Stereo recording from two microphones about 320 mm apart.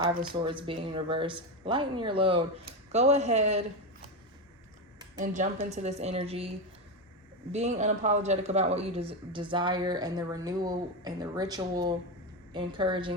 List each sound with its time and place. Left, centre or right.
0.4 s a woman's voice: centre
5.2 s a woman's voice: right
7.5 s speech: right